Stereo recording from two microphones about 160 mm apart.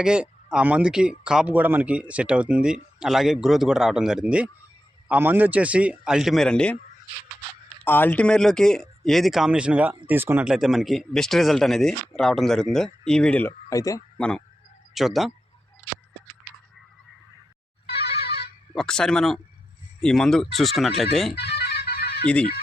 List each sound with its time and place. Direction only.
0.0 s a man's voice: 5° right (ahead or behind)
7.9 s speech: 10° left (ahead or behind)
13.7 s speech: 20° left (ahead or behind)
14.2 s speech: 5° left (ahead or behind)
17.9 s music: 90° left
18.7 s speech: 5° left (ahead or behind)
21.3 s music: 90° left